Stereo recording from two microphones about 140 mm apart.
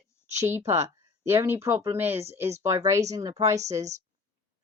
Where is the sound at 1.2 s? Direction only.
15° right (ahead or behind).